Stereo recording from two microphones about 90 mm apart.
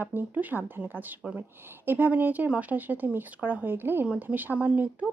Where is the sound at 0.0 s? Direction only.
20° right (ahead or behind).